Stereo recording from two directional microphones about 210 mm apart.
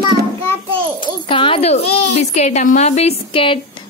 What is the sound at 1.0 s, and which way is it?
Speech, 25° left (ahead or behind).